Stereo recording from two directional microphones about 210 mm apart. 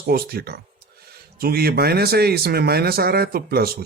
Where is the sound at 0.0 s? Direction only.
45° right (ahead or behind).